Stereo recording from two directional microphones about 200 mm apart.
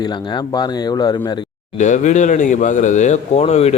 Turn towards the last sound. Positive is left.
turn(degrees=30)  # may be behind; listen again after turning